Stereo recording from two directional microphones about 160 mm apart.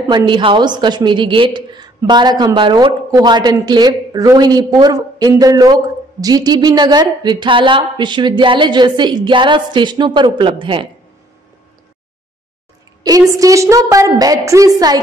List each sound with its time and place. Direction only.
0.1 s a woman's voice: 30° right (ahead or behind)
13.3 s a woman's voice: 20° right (ahead or behind)